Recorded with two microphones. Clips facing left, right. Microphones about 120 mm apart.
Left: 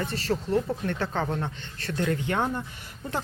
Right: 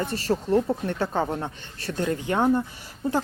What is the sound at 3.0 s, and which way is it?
Speech, 30° right (ahead or behind).